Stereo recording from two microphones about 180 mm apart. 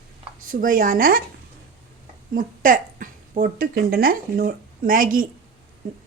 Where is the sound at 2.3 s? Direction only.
50° right (ahead or behind).